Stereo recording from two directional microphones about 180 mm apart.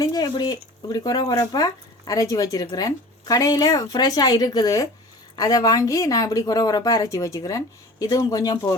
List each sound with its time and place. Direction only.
0.0 s speech: 20° left (ahead or behind)